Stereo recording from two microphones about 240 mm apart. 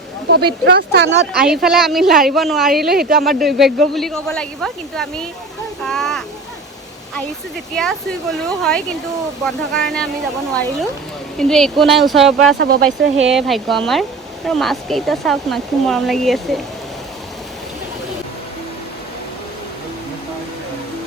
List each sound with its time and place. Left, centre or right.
0.3 s speech: right
1.5 s speech: centre
2.9 s speech: right
3.2 s speech: centre
5.8 s a sound: centre
7.8 s speech: centre
12.5 s speech: right
13.3 s speech: centre